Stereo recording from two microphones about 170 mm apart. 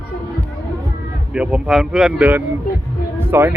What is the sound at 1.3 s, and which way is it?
Speech, 5° right (ahead or behind).